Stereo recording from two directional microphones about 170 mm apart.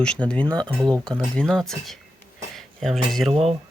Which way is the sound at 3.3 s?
35° right (ahead or behind).